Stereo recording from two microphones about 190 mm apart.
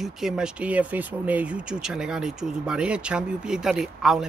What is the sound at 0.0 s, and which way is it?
Speech, 5° right (ahead or behind).